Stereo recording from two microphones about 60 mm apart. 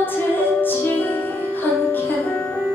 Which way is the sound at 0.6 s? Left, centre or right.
Left.